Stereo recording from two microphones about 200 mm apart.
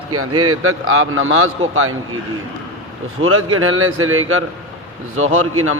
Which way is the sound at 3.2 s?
90° right.